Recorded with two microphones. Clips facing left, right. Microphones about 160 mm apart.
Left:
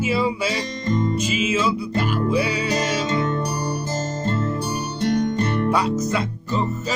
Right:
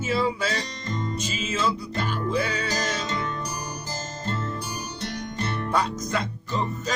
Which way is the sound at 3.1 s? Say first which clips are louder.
Left 7 dB; 45° left (ahead or behind).